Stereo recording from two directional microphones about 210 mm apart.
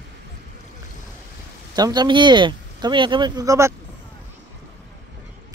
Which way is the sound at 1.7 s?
20° right (ahead or behind).